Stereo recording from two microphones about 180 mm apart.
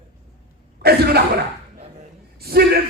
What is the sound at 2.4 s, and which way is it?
Speech, 60° right (ahead or behind).